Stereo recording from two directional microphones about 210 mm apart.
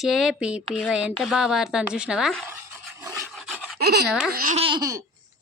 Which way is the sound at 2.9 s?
15° right (ahead or behind).